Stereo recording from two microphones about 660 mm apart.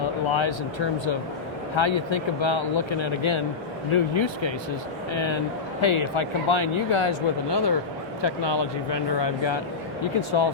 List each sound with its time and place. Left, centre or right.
0.0 s speech: left